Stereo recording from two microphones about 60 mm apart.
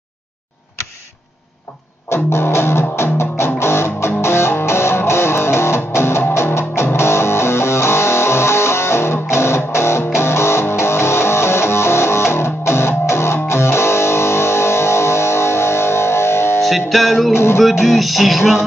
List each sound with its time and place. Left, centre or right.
2.0 s music: left
16.6 s music: centre